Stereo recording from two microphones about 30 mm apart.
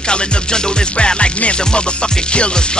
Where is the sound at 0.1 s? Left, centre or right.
Left.